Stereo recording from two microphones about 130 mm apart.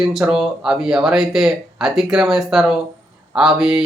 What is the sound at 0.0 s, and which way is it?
Speech, 5° right (ahead or behind).